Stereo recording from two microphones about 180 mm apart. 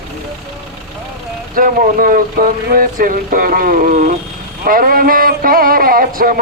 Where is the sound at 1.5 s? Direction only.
50° right (ahead or behind).